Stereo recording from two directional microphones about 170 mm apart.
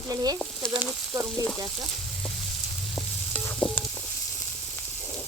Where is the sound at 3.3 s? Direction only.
10° left (ahead or behind).